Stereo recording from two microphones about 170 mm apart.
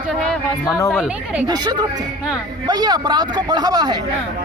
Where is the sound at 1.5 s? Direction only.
25° right (ahead or behind).